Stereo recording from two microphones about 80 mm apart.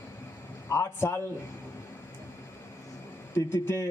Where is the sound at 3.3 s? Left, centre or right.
Left.